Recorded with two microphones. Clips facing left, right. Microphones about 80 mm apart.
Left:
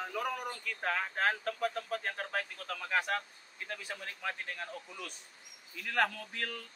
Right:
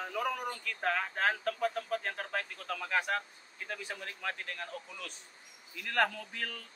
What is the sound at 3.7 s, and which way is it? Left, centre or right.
Speech, centre.